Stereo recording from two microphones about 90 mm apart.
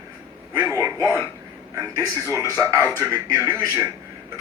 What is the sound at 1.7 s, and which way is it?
A man's voice, 40° right (ahead or behind).